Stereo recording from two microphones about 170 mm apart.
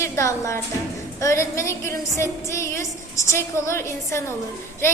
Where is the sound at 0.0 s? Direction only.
20° left (ahead or behind).